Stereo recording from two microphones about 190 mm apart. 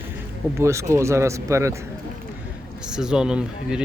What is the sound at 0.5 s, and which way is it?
Speech, 15° right (ahead or behind).